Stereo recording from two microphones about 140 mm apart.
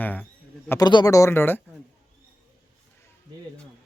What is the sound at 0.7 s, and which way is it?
Speech, 30° left (ahead or behind).